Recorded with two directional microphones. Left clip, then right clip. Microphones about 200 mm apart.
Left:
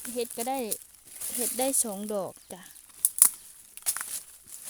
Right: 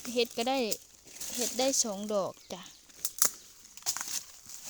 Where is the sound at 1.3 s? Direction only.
25° left (ahead or behind).